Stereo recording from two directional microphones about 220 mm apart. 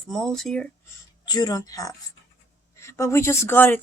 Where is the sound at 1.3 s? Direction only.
20° left (ahead or behind).